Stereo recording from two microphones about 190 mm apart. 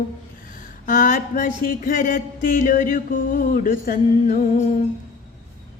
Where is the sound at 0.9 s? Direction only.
45° left (ahead or behind).